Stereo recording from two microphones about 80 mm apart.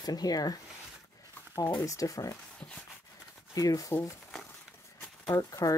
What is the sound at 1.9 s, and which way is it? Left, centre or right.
Speech, left.